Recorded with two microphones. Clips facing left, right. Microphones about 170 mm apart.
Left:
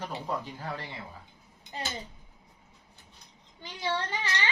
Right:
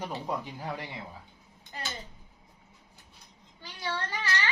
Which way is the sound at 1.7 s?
25° left (ahead or behind).